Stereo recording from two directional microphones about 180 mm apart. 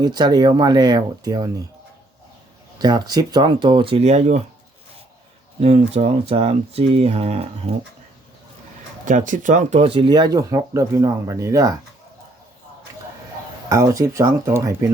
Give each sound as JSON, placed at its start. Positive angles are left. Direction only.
{"t": 0.0, "sound": "speech", "side_deg": -20}
{"t": 2.7, "sound": "speech", "side_deg": -20}
{"t": 5.5, "sound": "speech", "side_deg": -35}
{"t": 9.0, "sound": "speech", "side_deg": -45}
{"t": 13.7, "sound": "speech", "side_deg": -20}